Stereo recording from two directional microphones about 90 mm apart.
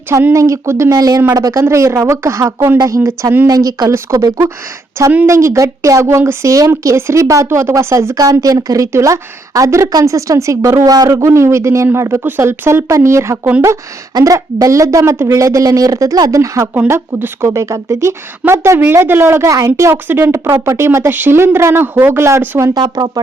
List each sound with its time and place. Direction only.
0.1 s speech: 30° right (ahead or behind)
1.6 s speech: 30° right (ahead or behind)
2.7 s speech: 45° right (ahead or behind)
3.0 s speech: 30° right (ahead or behind)
3.4 s speech: 40° right (ahead or behind)
14.1 s speech: 50° right (ahead or behind)
14.3 s speech: 35° right (ahead or behind)
15.4 s speech: 40° right (ahead or behind)
16.9 s speech: 25° right (ahead or behind)
22.7 s speech: 50° right (ahead or behind)